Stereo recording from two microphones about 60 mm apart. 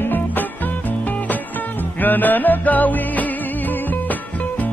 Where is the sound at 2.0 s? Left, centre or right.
Left.